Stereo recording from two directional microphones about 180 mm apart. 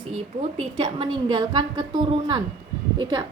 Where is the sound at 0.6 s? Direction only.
35° right (ahead or behind).